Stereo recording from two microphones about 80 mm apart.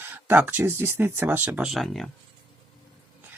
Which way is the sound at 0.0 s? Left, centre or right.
Right.